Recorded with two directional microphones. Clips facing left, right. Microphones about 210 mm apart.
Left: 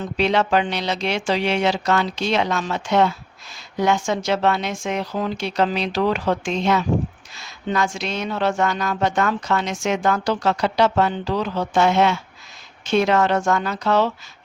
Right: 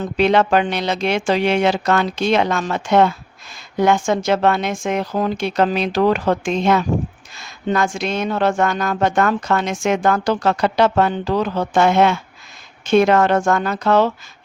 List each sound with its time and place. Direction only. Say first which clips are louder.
0.0 s speech: right 4 dB; 55° right (ahead or behind)